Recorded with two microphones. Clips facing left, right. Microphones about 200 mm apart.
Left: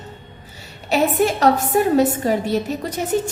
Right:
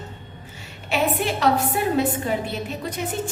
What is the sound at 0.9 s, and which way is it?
A woman's voice, 45° left (ahead or behind).